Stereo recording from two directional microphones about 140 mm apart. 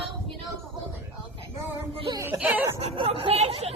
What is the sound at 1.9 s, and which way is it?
Music, 40° right (ahead or behind).